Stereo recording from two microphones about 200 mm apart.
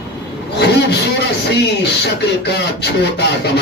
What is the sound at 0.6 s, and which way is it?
Vehicle, 55° left (ahead or behind).